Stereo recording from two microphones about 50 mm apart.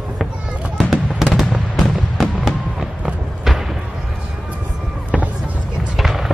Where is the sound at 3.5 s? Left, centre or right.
Centre.